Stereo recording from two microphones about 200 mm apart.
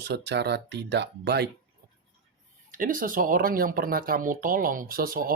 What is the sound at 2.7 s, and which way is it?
Speech, 45° right (ahead or behind).